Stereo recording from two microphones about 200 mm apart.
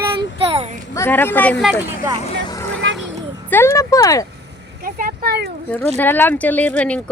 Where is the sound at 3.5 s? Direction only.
10° left (ahead or behind).